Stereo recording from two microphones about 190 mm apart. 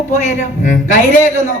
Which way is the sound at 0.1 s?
40° left (ahead or behind).